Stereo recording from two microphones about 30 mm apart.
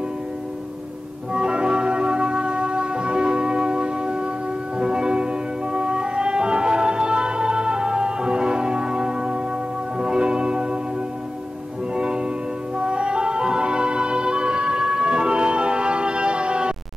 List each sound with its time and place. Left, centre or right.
1.3 s music: right
11.9 s music: right